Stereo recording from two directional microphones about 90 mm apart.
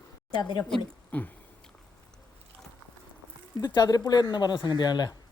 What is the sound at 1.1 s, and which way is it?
Drip, 20° left (ahead or behind).